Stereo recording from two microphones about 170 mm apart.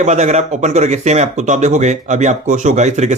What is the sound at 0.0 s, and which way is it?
Speech, 40° right (ahead or behind).